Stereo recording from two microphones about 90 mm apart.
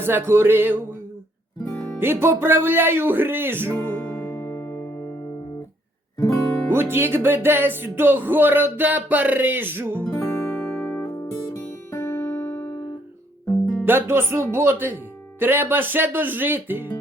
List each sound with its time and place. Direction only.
0.0 s speech: 25° right (ahead or behind)
2.0 s speech: 25° right (ahead or behind)
3.8 s music: 25° left (ahead or behind)
6.7 s speech: 25° right (ahead or behind)
10.1 s music: 40° left (ahead or behind)
10.5 s music: 20° left (ahead or behind)
11.1 s music: 35° left (ahead or behind)
13.8 s speech: 25° right (ahead or behind)